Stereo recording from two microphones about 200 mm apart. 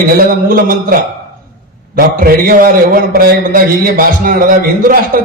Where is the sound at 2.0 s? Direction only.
45° right (ahead or behind).